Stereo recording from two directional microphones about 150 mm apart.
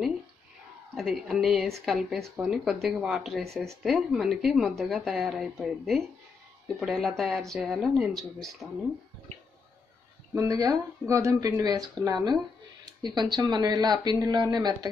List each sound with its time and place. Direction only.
0.9 s a woman's voice: centre (ahead or behind)
10.3 s speech: 20° right (ahead or behind)